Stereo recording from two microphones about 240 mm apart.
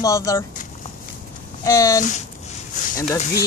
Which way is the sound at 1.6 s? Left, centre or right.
Centre.